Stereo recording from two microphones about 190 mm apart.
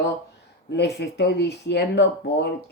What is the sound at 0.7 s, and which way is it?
Speech, 65° left (ahead or behind).